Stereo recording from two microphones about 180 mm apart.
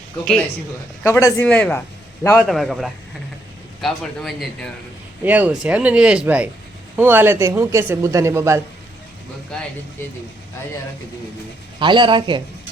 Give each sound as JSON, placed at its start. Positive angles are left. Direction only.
{"t": 1.0, "sound": "a man's voice", "side_deg": 15}
{"t": 11.8, "sound": "speech", "side_deg": -25}